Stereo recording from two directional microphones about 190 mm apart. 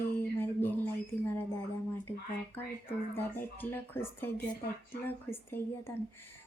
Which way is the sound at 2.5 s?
10° left (ahead or behind).